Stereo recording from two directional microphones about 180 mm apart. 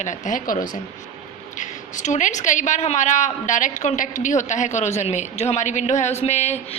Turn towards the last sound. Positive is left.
turn(degrees=40)  # may be behind; listen again after turning